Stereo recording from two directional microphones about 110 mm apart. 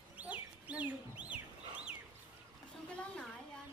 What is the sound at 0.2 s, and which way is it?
Bird, 10° right (ahead or behind).